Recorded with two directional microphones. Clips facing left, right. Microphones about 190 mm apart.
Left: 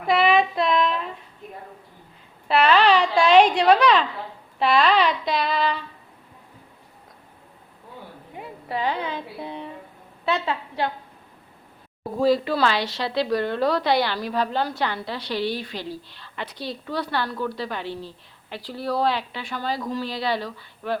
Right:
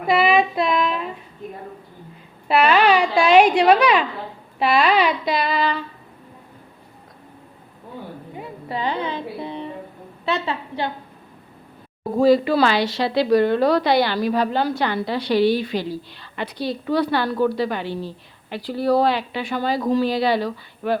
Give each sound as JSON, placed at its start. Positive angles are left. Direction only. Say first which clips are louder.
{"t": 0.1, "sound": "child singing", "louder": "right 2 dB", "side_deg": -5}
{"t": 2.5, "sound": "a woman's voice", "louder": "right 2 dB", "side_deg": -10}
{"t": 4.6, "sound": "child singing", "louder": "right 1 dB", "side_deg": -10}
{"t": 8.4, "sound": "a sound", "louder": "even", "side_deg": 5}
{"t": 10.2, "sound": "a woman's voice", "louder": "right 1 dB", "side_deg": 0}
{"t": 12.2, "sound": "child singing", "louder": "right 5 dB", "side_deg": 0}
{"t": 12.5, "sound": "a woman's voice", "louder": "right 5 dB", "side_deg": -5}
{"t": 18.8, "sound": "speech", "louder": "right 7 dB", "side_deg": -55}
{"t": 19.0, "sound": "a woman's voice", "louder": "right 4 dB", "side_deg": -5}